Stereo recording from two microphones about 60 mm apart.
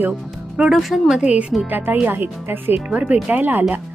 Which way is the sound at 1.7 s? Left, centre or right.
Right.